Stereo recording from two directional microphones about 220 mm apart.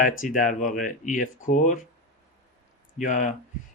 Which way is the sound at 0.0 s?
35° left (ahead or behind).